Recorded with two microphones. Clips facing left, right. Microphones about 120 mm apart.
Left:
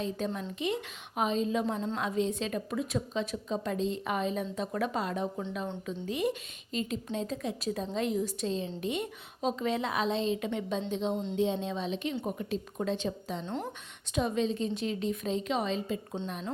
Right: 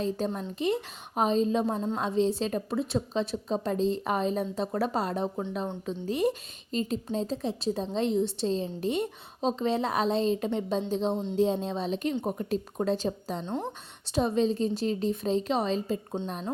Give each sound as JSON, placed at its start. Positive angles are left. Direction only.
{"t": 0.2, "sound": "a woman's voice", "side_deg": -35}
{"t": 13.4, "sound": "speech", "side_deg": -20}
{"t": 14.2, "sound": "a woman's voice", "side_deg": -35}